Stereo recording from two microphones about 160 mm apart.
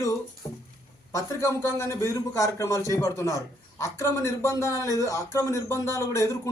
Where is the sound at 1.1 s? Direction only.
20° left (ahead or behind).